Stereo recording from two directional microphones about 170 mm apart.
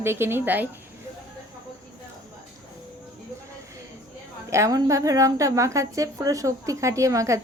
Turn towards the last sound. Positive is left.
turn(degrees=-20)  # may be behind; listen again after turning